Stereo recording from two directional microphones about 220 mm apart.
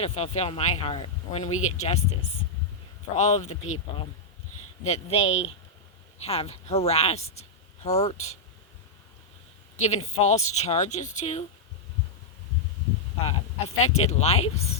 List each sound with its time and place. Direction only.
0.0 s speech: 30° left (ahead or behind)
1.5 s speech: 75° left (ahead or behind)
1.8 s speech: 30° left (ahead or behind)
3.2 s speech: 30° left (ahead or behind)
4.8 s speech: 30° left (ahead or behind)
5.3 s speech: 60° left (ahead or behind)
6.2 s speech: 30° left (ahead or behind)
9.8 s speech: 30° left (ahead or behind)
13.2 s speech: 30° left (ahead or behind)